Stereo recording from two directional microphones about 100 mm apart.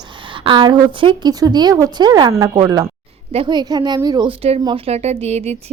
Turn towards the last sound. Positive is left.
turn(degrees=-90)